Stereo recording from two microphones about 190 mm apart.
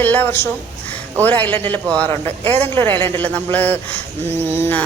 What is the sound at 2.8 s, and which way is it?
A woman's voice, 10° left (ahead or behind).